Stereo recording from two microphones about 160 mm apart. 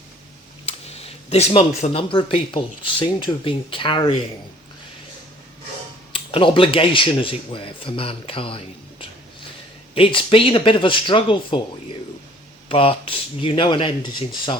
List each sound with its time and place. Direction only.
0.6 s speech: 40° left (ahead or behind)
6.1 s speech: 35° left (ahead or behind)
12.6 s speech: 35° left (ahead or behind)